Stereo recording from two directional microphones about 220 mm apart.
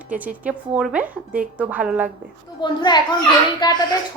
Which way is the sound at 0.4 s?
5° right (ahead or behind).